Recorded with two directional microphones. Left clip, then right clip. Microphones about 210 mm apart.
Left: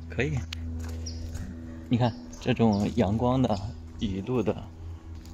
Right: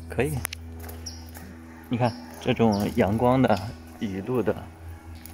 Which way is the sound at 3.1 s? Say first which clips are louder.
Right 5 dB; 10° right (ahead or behind).